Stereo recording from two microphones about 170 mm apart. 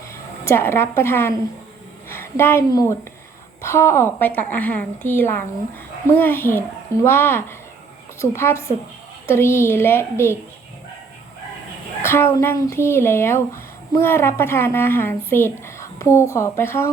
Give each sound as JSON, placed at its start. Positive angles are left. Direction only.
{"t": 0.1, "sound": "a woman's voice", "side_deg": 15}
{"t": 12.0, "sound": "speech", "side_deg": 15}